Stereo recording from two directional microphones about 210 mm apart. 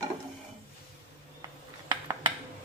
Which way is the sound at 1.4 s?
20° right (ahead or behind).